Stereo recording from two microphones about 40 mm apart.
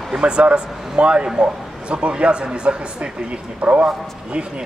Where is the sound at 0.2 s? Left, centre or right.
Right.